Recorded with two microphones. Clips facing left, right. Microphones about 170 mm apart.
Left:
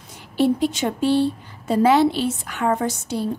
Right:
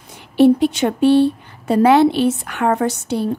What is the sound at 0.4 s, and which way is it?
Speech, 65° right (ahead or behind).